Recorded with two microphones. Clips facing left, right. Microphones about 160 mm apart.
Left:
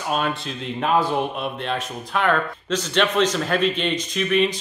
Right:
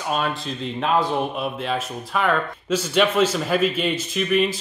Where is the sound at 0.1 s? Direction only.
Centre (ahead or behind).